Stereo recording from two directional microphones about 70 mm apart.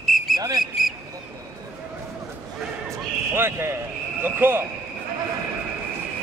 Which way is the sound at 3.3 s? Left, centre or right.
Right.